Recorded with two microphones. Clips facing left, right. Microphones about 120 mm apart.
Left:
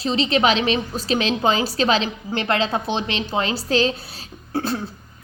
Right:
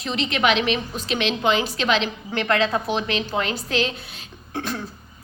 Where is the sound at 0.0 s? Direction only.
30° left (ahead or behind).